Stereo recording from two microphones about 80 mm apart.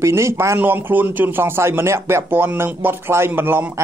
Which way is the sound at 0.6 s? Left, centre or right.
Right.